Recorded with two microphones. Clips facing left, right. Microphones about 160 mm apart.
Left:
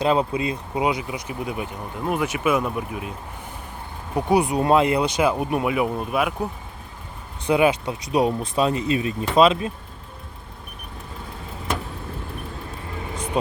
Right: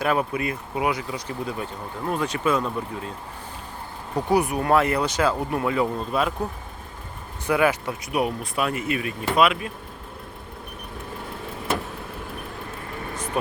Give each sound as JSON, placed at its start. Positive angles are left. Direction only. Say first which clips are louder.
{"t": 0.0, "sound": "speech", "louder": "left 3 dB", "side_deg": 20}
{"t": 13.1, "sound": "vehicle", "louder": "left 3 dB", "side_deg": 15}